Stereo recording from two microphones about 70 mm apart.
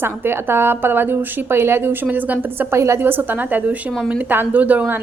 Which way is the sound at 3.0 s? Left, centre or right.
Right.